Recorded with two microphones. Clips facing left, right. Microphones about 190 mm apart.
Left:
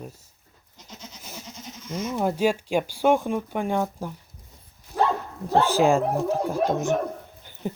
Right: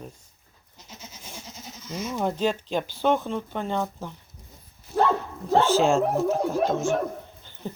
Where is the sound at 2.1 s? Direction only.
10° left (ahead or behind).